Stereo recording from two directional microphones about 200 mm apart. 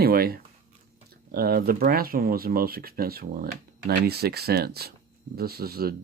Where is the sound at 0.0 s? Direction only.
50° right (ahead or behind).